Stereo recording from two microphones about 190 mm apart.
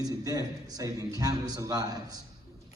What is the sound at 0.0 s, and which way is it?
A man's voice, 20° right (ahead or behind).